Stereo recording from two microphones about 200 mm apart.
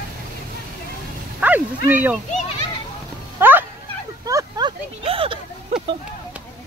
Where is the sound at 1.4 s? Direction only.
10° right (ahead or behind).